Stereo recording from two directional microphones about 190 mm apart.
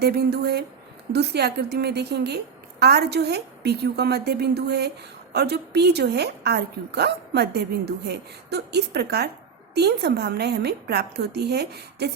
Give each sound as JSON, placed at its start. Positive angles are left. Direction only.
{"t": 0.0, "sound": "a woman's voice", "side_deg": -60}